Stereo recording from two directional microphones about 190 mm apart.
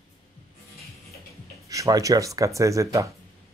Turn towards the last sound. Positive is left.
turn(degrees=-15)  # may be behind; listen again after turning